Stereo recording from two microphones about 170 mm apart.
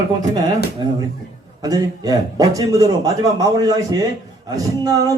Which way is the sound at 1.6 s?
20° right (ahead or behind).